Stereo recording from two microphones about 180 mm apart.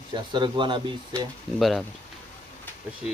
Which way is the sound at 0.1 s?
25° right (ahead or behind).